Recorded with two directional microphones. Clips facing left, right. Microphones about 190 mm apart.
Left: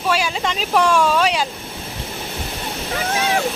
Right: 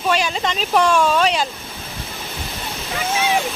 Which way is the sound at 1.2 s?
10° left (ahead or behind).